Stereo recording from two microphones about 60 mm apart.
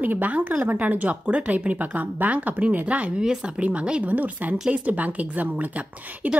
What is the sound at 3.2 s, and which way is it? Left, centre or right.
Speech, centre.